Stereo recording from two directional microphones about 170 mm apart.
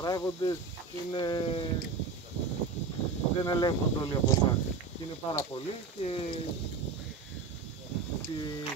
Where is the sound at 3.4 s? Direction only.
25° left (ahead or behind).